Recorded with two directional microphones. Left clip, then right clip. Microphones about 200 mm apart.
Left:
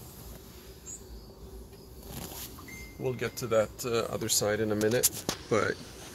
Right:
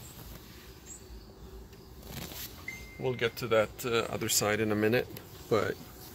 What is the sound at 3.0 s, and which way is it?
Speech, 25° right (ahead or behind).